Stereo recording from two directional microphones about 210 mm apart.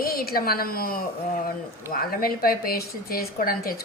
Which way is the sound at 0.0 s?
45° left (ahead or behind).